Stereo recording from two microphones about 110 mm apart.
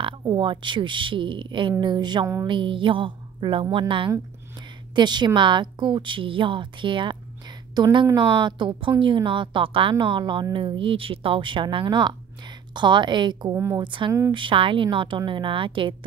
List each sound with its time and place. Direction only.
0.4 s a woman's voice: 50° right (ahead or behind)
13.5 s a woman's voice: 20° right (ahead or behind)
13.7 s a woman's voice: 45° right (ahead or behind)